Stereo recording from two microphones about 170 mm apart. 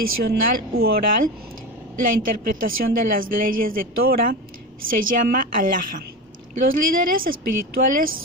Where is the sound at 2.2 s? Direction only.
55° right (ahead or behind).